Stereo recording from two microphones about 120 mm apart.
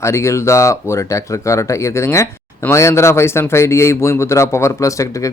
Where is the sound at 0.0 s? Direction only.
25° left (ahead or behind).